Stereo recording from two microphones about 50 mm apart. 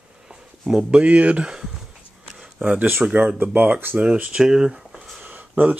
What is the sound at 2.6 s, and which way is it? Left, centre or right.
Speech, right.